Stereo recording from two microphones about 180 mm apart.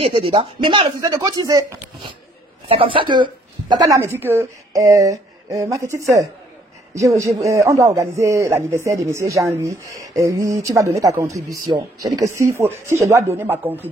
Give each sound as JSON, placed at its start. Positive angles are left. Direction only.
{"t": 0.0, "sound": "speech", "side_deg": -30}
{"t": 4.0, "sound": "a man's voice", "side_deg": -15}